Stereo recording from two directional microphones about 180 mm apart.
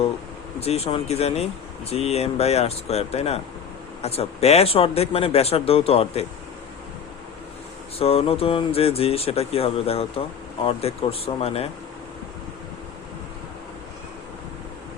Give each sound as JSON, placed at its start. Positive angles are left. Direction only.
{"t": 0.6, "sound": "speech", "side_deg": 35}
{"t": 7.9, "sound": "speech", "side_deg": 35}